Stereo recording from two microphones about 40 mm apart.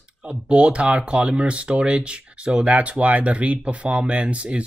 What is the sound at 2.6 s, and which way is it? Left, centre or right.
Speech, right.